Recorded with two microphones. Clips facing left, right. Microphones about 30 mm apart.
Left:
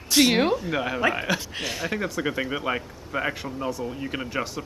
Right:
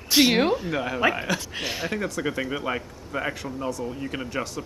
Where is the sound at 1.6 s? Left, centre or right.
Centre.